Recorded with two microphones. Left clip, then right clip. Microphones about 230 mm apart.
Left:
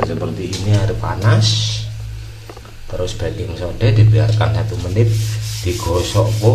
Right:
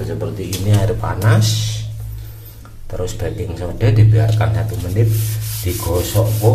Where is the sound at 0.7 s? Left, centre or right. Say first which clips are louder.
Right 2 dB; centre.